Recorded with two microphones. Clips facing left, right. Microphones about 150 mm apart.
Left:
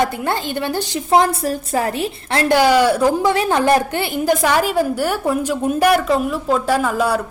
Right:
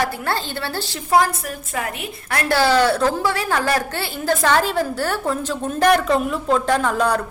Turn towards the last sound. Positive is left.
turn(degrees=5)  # may be behind; listen again after turning